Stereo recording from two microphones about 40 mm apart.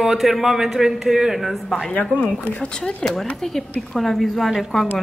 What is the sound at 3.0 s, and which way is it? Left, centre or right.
Speech, centre.